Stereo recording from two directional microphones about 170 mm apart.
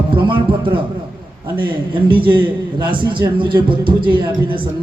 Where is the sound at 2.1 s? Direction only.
30° right (ahead or behind).